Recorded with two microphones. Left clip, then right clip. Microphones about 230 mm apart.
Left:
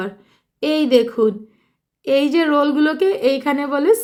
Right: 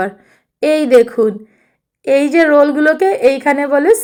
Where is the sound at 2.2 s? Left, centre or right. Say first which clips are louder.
Right 8 dB; left.